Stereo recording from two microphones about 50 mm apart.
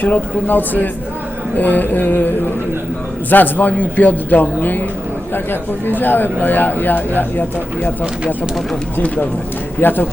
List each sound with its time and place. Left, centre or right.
0.0 s a man's voice: left
9.0 s a man's voice: left